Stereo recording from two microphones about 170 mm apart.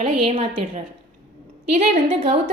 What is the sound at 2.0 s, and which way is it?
Speech, 35° right (ahead or behind).